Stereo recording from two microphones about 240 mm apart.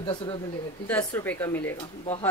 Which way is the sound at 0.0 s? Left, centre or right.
Centre.